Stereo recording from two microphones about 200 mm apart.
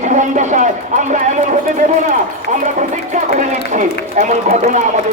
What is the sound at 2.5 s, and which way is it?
A man's voice, 35° right (ahead or behind).